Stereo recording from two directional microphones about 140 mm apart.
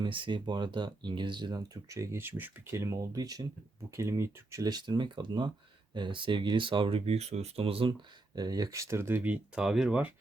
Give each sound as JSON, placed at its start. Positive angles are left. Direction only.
{"t": 0.0, "sound": "speech", "side_deg": -35}
{"t": 8.4, "sound": "speech", "side_deg": -30}